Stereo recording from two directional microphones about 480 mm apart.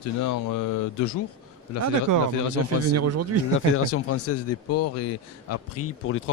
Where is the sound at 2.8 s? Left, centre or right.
Right.